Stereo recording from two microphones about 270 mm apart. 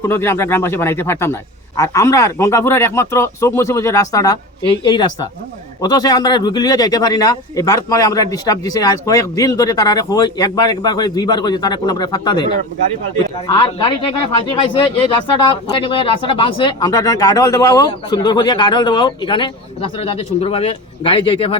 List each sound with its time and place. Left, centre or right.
0.0 s speech: centre
13.5 s speech: centre